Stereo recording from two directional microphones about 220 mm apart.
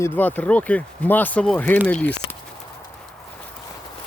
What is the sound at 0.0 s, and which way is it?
Speech, 10° left (ahead or behind).